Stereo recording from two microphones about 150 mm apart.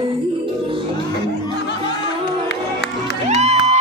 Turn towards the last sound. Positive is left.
turn(degrees=-50)  # may be behind; listen again after turning